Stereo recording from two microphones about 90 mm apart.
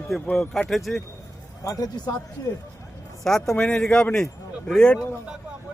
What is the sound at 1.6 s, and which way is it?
Speech, 40° left (ahead or behind).